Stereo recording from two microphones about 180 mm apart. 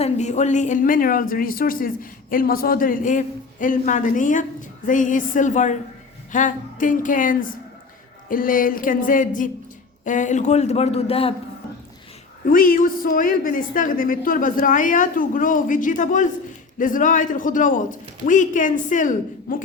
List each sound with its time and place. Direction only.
0.0 s a man's voice: 40° left (ahead or behind)
12.5 s speech: 50° left (ahead or behind)